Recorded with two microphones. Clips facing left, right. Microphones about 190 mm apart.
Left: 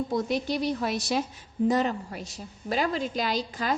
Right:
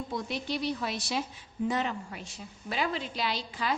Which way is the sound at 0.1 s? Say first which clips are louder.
Left 6 dB; 45° left (ahead or behind).